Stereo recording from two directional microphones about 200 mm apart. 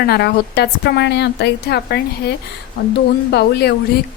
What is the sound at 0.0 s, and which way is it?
A woman's voice, 55° left (ahead or behind).